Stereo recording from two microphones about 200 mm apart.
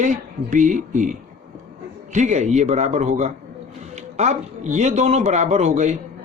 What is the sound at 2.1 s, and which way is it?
Speech, 35° right (ahead or behind).